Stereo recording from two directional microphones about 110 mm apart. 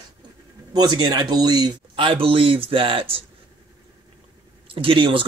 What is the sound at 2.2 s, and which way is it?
Speech, 55° right (ahead or behind).